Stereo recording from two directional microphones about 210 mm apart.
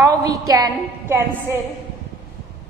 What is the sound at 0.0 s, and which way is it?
A woman's voice, 15° right (ahead or behind).